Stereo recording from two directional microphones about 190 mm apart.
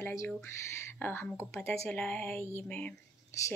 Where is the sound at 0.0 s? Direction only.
15° left (ahead or behind).